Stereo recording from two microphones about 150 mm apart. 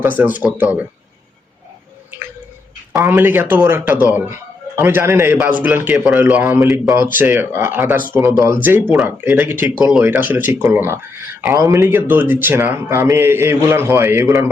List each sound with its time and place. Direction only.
0.2 s a man's voice: 10° right (ahead or behind)
2.1 s bird: 15° right (ahead or behind)
2.9 s a man's voice: 15° right (ahead or behind)